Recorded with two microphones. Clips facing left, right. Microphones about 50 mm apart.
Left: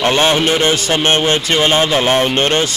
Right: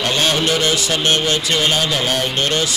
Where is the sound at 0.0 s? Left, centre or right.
Left.